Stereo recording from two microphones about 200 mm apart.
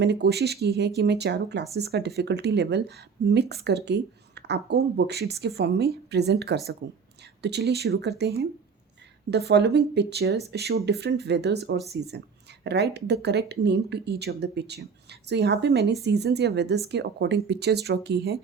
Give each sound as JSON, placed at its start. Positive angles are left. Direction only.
{"t": 0.0, "sound": "speech", "side_deg": -55}